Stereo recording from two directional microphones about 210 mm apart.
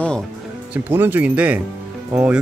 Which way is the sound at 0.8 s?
10° right (ahead or behind).